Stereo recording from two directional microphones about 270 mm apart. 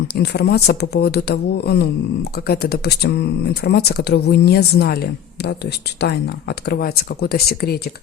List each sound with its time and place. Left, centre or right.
0.1 s speech: left